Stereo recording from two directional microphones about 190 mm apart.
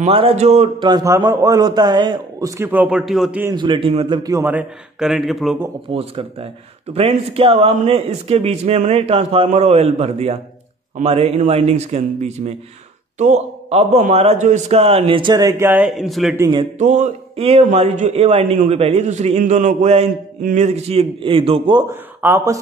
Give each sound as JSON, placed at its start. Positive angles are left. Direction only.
{"t": 0.0, "sound": "a man's voice", "side_deg": -30}
{"t": 3.5, "sound": "a man's voice", "side_deg": -25}
{"t": 4.2, "sound": "a man's voice", "side_deg": -15}
{"t": 5.9, "sound": "a man's voice", "side_deg": -30}
{"t": 16.3, "sound": "a man's voice", "side_deg": -20}
{"t": 16.7, "sound": "a man's voice", "side_deg": -40}
{"t": 22.2, "sound": "speech", "side_deg": -15}